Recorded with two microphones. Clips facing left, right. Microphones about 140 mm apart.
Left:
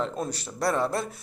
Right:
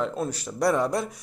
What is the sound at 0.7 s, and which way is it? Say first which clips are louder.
Speech: right 2 dB; 15° right (ahead or behind).